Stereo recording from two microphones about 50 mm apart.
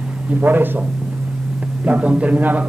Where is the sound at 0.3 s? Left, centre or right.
Right.